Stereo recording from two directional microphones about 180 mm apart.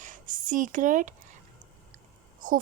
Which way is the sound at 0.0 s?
45° right (ahead or behind).